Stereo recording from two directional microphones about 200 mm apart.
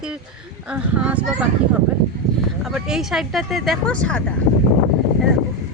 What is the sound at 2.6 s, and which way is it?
A woman's voice, 5° right (ahead or behind).